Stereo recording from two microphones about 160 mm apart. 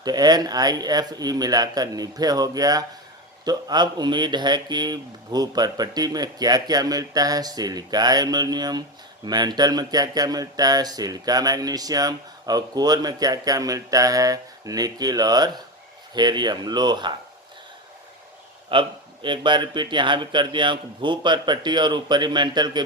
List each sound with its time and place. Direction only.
0.0 s speech: 25° right (ahead or behind)
18.7 s speech: 30° right (ahead or behind)